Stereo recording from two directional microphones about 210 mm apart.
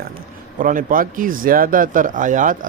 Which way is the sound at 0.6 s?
40° right (ahead or behind).